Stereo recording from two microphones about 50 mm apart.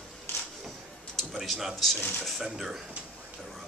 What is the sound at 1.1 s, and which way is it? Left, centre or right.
Speech, centre.